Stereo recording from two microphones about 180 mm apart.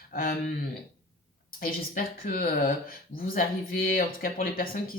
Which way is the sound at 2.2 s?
55° left (ahead or behind).